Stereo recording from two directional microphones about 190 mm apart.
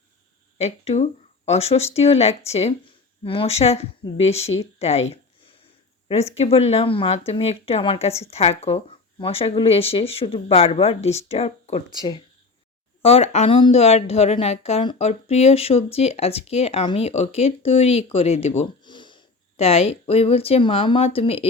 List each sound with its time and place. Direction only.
0.6 s a woman's voice: 35° left (ahead or behind)
6.1 s a woman's voice: 35° left (ahead or behind)
11.9 s a woman's voice: 20° left (ahead or behind)